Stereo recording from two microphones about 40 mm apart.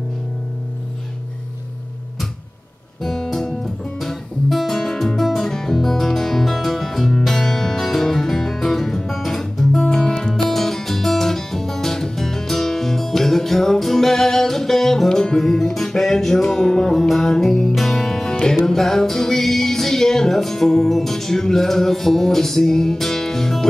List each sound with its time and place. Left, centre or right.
3.0 s music: centre
17.1 s music: centre